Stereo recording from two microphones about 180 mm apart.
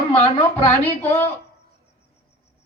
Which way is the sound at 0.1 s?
10° left (ahead or behind).